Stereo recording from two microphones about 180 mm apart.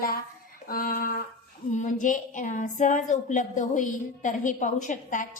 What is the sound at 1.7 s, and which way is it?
A woman's voice, 45° left (ahead or behind).